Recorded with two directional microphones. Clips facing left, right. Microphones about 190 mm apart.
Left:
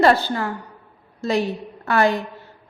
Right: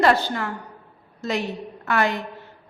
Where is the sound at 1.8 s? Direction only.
35° left (ahead or behind).